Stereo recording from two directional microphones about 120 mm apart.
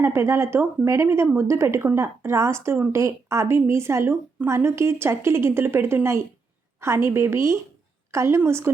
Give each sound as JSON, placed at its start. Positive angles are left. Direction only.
{"t": 0.0, "sound": "speech", "side_deg": -20}